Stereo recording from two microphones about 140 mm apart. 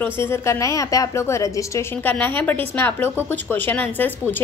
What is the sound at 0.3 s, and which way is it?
A woman's voice, 20° left (ahead or behind).